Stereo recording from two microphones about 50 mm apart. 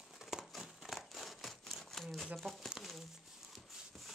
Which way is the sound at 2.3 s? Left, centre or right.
Centre.